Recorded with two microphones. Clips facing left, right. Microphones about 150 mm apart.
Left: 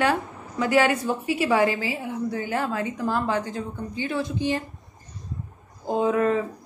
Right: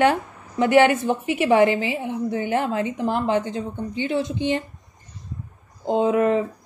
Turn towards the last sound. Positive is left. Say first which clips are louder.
# right 3 dB
turn(degrees=-20)  # may be behind; listen again after turning